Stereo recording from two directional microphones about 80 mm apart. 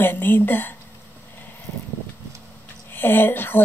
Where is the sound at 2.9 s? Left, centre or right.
Left.